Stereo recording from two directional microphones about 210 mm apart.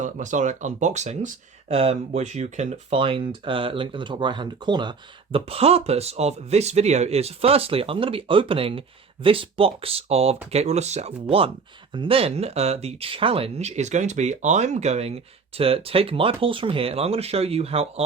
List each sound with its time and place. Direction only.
0.0 s speech: 35° right (ahead or behind)